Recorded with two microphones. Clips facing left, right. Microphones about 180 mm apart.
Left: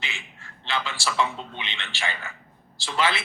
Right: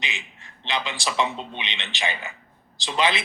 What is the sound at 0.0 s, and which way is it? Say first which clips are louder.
A man's voice: right 3 dB; 20° right (ahead or behind).